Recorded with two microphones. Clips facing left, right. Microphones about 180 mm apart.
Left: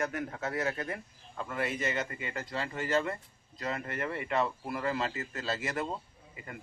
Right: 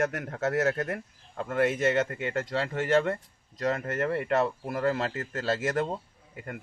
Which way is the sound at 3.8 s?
50° right (ahead or behind).